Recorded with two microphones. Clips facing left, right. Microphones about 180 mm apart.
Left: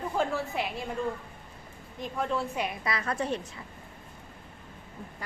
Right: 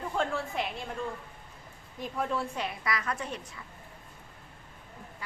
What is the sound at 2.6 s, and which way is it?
Speech, 20° left (ahead or behind).